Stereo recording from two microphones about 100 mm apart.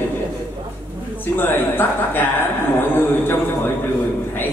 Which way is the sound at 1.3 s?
20° left (ahead or behind).